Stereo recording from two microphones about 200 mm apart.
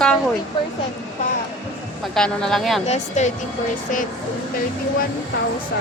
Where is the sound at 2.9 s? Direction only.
35° left (ahead or behind).